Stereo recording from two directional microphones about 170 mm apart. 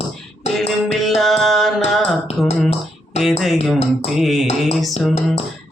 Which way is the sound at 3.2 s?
Centre (ahead or behind).